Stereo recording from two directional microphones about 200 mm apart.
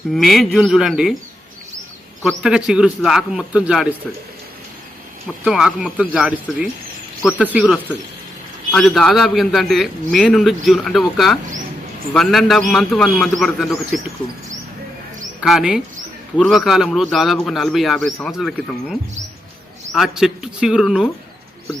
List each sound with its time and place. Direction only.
0.1 s a man's voice: centre (ahead or behind)
2.2 s a man's voice: 5° right (ahead or behind)
5.4 s a man's voice: 5° right (ahead or behind)
15.4 s a man's voice: 5° right (ahead or behind)